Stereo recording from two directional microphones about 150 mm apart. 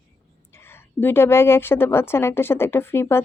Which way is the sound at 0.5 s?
15° left (ahead or behind).